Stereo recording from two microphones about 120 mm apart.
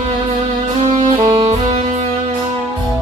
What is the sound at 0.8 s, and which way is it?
Music, 60° right (ahead or behind).